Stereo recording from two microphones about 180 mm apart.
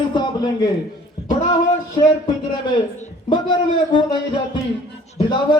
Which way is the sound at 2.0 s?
25° left (ahead or behind).